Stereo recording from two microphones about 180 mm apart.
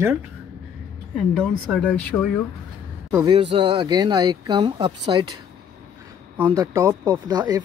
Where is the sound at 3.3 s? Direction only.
30° right (ahead or behind).